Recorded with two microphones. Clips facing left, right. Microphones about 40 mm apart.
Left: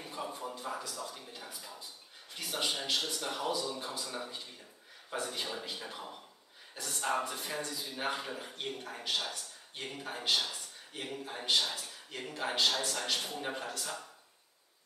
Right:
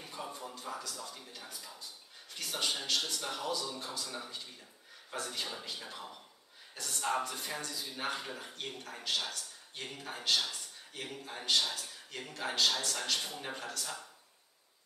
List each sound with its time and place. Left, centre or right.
0.0 s music: centre
1.3 s a man's voice: centre
6.9 s a man's voice: centre
13.6 s speech: left